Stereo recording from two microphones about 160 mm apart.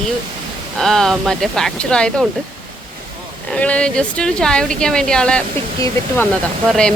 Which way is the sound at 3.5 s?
5° left (ahead or behind).